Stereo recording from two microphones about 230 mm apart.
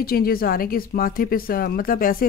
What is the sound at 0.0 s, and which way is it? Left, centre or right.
Speech, left.